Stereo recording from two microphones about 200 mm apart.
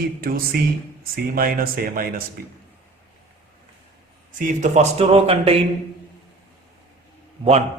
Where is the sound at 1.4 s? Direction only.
45° right (ahead or behind).